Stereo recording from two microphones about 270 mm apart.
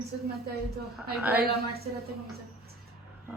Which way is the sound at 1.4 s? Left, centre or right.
Right.